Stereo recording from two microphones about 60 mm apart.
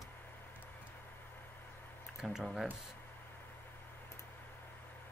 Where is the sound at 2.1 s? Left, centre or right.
Centre.